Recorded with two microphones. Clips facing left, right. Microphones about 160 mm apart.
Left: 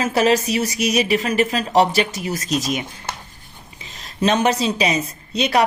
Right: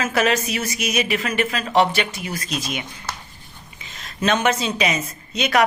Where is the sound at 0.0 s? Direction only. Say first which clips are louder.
Left 3 dB; 30° left (ahead or behind).